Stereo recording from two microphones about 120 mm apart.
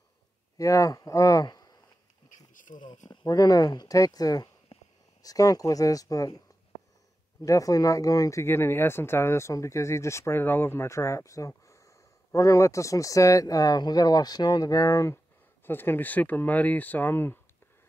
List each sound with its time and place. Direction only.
0.6 s speech: 25° left (ahead or behind)
2.2 s insect: 90° left
3.1 s speech: 30° left (ahead or behind)
4.7 s a sound: 50° left (ahead or behind)
5.2 s speech: 30° left (ahead or behind)
7.4 s speech: 30° left (ahead or behind)